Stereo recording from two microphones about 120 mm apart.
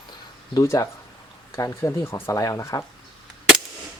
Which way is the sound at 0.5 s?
25° left (ahead or behind).